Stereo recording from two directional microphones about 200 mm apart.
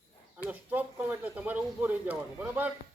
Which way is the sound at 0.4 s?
10° right (ahead or behind).